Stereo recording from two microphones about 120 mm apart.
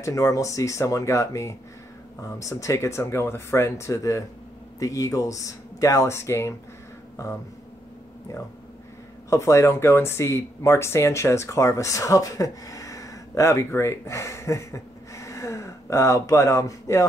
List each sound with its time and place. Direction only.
0.0 s speech: 25° left (ahead or behind)
9.3 s speech: 25° left (ahead or behind)